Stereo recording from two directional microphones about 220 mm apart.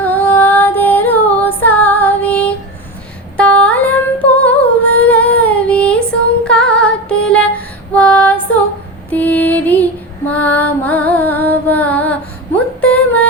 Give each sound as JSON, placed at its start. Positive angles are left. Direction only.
{"t": 0.0, "sound": "female singing", "side_deg": 10}
{"t": 3.3, "sound": "humming", "side_deg": 5}
{"t": 9.0, "sound": "female singing", "side_deg": 5}
{"t": 12.8, "sound": "music", "side_deg": 5}